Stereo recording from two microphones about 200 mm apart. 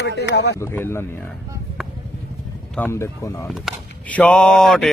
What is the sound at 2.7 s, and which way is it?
A man's voice, 10° left (ahead or behind).